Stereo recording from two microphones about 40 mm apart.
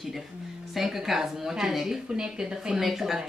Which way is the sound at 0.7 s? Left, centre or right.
Centre.